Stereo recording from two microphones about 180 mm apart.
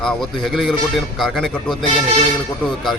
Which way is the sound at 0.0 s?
Centre (ahead or behind).